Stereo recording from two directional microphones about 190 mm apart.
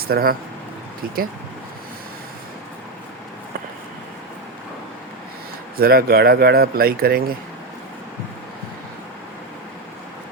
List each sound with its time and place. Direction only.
0.1 s speech: 50° right (ahead or behind)
5.7 s speech: 55° right (ahead or behind)